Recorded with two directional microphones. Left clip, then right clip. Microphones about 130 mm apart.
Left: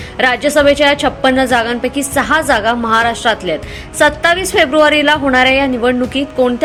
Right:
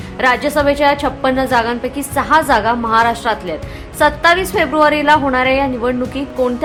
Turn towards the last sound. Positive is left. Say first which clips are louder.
# left 4 dB
turn(degrees=20)  # may be behind; listen again after turning